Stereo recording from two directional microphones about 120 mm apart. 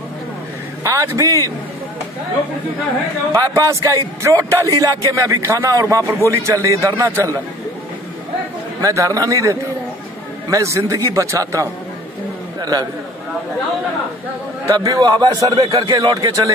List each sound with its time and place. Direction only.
0.8 s a man's voice: 25° right (ahead or behind)
3.3 s a man's voice: 30° right (ahead or behind)
8.8 s a man's voice: 30° right (ahead or behind)
12.5 s a sound: 35° right (ahead or behind)
14.7 s speech: 30° right (ahead or behind)